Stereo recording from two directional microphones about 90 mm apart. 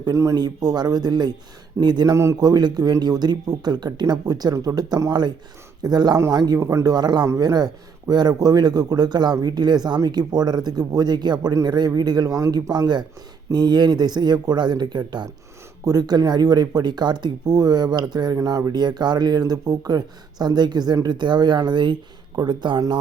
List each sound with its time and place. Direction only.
0.1 s speech: 35° right (ahead or behind)
0.3 s a man's voice: 50° right (ahead or behind)
15.8 s a man's voice: 45° right (ahead or behind)
18.3 s a man's voice: 40° right (ahead or behind); by 22.8 s 55° right (ahead or behind)